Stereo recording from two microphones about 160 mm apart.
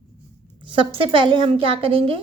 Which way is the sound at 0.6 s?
30° right (ahead or behind).